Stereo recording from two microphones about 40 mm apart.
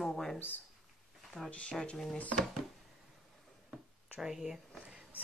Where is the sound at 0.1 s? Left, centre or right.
Centre.